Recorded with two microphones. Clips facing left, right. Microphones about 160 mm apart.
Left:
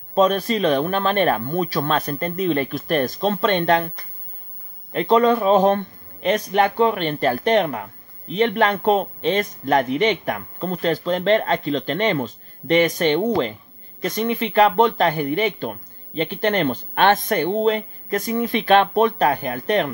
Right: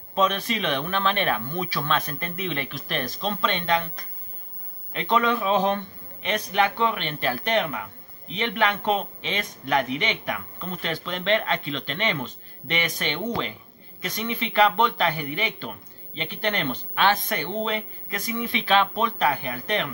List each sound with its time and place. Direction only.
0.1 s a man's voice: 40° left (ahead or behind)
4.9 s a man's voice: 40° left (ahead or behind)